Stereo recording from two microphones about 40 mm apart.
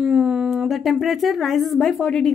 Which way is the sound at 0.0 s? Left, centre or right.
Centre.